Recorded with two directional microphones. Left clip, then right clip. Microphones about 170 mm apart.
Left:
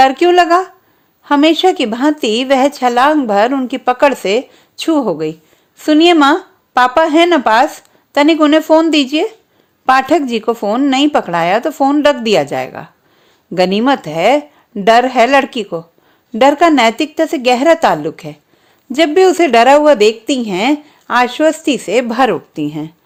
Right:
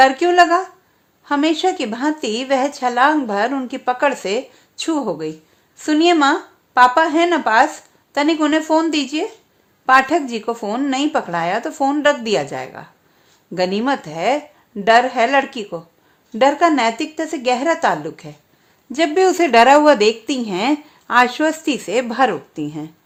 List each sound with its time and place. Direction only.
0.0 s a woman's voice: 40° left (ahead or behind)